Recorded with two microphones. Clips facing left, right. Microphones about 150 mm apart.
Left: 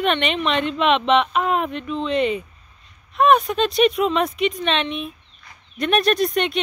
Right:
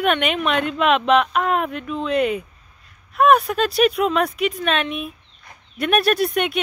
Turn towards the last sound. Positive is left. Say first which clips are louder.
# even
turn(degrees=-5)  # may be behind; listen again after turning